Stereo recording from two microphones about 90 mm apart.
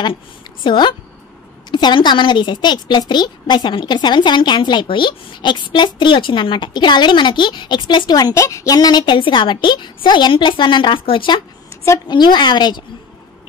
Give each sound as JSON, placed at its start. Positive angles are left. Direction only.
{"t": 0.7, "sound": "a woman's voice", "side_deg": 60}
{"t": 8.4, "sound": "a woman's voice", "side_deg": 35}
{"t": 11.7, "sound": "a sound", "side_deg": 35}
{"t": 12.1, "sound": "a woman's voice", "side_deg": 55}